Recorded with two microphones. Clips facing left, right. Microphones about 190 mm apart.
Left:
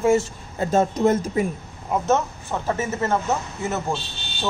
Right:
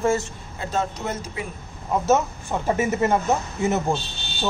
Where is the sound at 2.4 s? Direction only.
15° right (ahead or behind).